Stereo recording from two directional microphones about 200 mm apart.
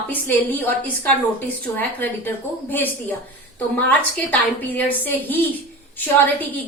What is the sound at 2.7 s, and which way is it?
A woman's voice, 10° left (ahead or behind).